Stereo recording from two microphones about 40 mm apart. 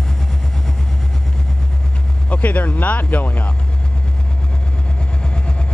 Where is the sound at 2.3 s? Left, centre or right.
Left.